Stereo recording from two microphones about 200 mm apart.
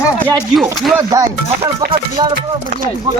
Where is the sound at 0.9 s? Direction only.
15° right (ahead or behind).